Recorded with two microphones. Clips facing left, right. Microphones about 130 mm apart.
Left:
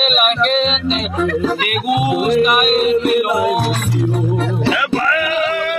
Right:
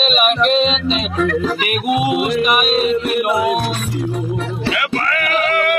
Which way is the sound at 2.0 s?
30° left (ahead or behind).